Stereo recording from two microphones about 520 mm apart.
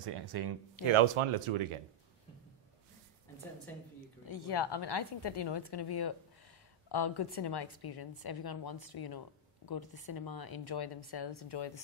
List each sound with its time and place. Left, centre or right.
0.0 s speech: right
0.9 s speech: right
4.3 s a woman's voice: left